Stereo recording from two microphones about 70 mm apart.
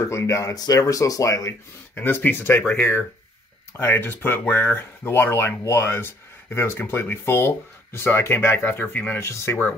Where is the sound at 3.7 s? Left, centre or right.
Left.